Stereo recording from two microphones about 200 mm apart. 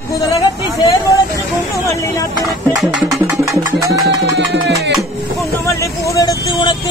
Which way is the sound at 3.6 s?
15° right (ahead or behind).